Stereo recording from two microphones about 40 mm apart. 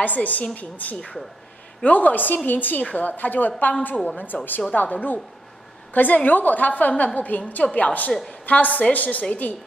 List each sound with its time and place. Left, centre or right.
0.0 s a woman's voice: left